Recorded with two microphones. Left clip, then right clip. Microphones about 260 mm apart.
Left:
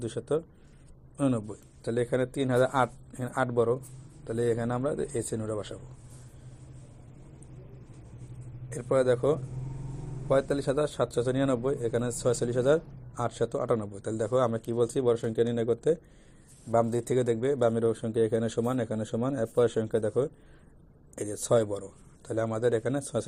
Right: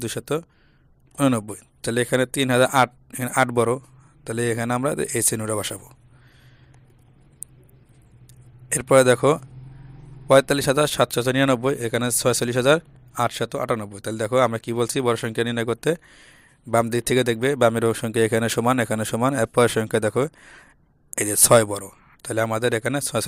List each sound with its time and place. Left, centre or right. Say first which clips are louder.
0.0 s speech: right 4 dB; right
8.7 s a man's voice: right 9 dB; right